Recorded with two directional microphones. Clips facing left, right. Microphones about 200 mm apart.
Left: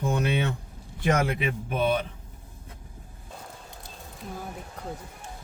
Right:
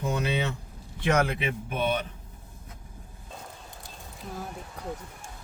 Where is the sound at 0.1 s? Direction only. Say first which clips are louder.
Left 1 dB; 55° left (ahead or behind).